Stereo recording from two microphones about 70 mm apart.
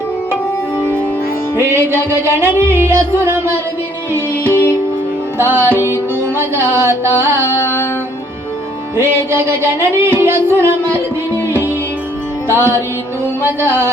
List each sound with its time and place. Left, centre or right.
1.6 s music: right
7.6 s music: left
9.0 s music: right
12.5 s music: right